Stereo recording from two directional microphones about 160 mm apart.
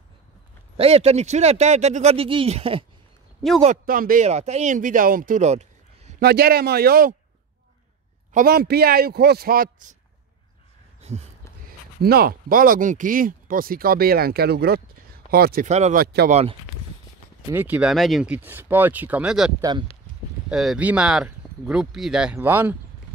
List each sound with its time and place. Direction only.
0.7 s speech: 40° right (ahead or behind)
3.6 s speech: 60° right (ahead or behind)
4.3 s speech: 45° right (ahead or behind)
6.2 s speech: 75° right (ahead or behind)
8.3 s speech: 65° right (ahead or behind)
11.0 s a sound: 45° right (ahead or behind)
12.0 s speech: 75° right (ahead or behind)
15.6 s speech: 50° right (ahead or behind)
16.0 s speech: 75° right (ahead or behind)
16.3 s speech: 40° right (ahead or behind)
17.5 s speech: 10° right (ahead or behind)